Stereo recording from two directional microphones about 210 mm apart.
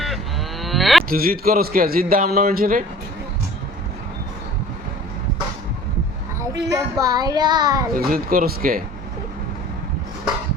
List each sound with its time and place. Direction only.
0.6 s cattle: centre (ahead or behind)
1.1 s a man's voice: 45° right (ahead or behind)
6.5 s speech: 15° right (ahead or behind)
7.9 s a man's voice: 45° right (ahead or behind)